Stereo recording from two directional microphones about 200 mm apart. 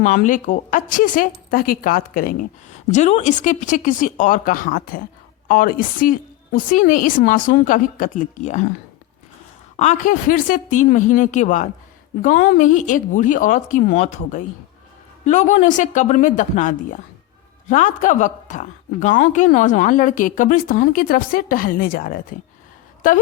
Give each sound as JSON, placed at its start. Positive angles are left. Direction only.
{"t": 0.0, "sound": "a woman's voice", "side_deg": 40}
{"t": 9.7, "sound": "a woman's voice", "side_deg": 35}